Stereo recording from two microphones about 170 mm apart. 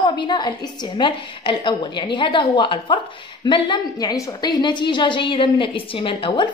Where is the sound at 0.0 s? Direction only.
25° left (ahead or behind).